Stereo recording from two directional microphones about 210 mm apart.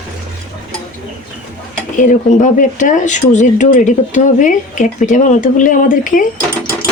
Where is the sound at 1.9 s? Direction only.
35° left (ahead or behind).